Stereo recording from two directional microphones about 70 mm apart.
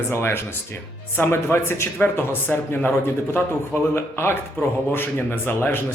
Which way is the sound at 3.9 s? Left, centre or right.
Left.